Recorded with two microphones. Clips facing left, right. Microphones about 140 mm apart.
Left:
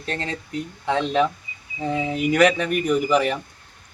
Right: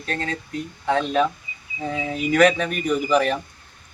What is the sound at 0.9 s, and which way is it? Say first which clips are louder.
Speech: left 1 dB; 15° left (ahead or behind).